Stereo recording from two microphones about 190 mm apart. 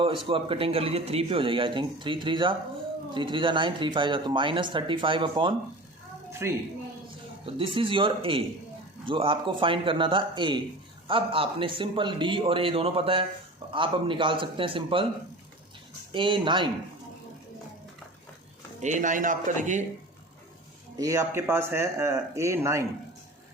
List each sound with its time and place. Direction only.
0.3 s speech: 30° right (ahead or behind)
6.4 s speech: 15° right (ahead or behind)
7.4 s speech: 30° right (ahead or behind)
16.1 s speech: 25° right (ahead or behind)
18.8 s speech: 40° right (ahead or behind)
20.9 s speech: 20° right (ahead or behind)